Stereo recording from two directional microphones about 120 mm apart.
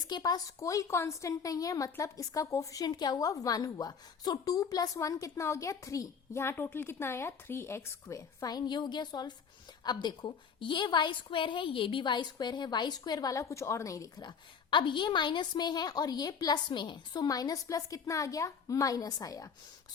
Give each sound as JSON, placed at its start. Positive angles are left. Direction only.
{"t": 0.0, "sound": "a woman's voice", "side_deg": 35}